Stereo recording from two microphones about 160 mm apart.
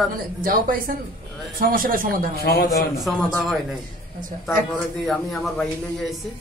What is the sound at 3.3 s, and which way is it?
Speech, centre (ahead or behind).